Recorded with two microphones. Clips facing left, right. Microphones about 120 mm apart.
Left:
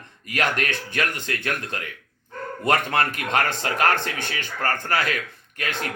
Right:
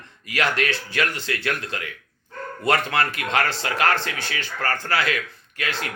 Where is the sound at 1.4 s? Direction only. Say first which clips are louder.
Right 2 dB; 55° left (ahead or behind).